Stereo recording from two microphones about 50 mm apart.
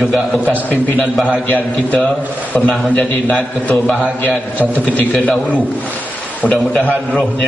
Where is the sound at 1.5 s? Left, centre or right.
Left.